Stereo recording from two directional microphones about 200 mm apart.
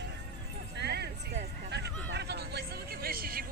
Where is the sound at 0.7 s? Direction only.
55° right (ahead or behind).